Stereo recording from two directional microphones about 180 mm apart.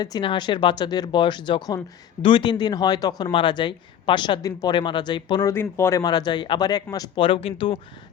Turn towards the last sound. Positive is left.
turn(degrees=30)  # may be behind; listen again after turning